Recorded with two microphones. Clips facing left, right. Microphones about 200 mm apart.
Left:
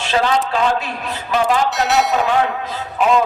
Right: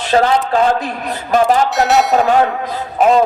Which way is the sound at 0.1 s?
45° right (ahead or behind).